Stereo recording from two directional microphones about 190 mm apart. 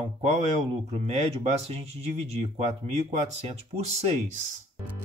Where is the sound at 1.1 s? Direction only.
35° right (ahead or behind).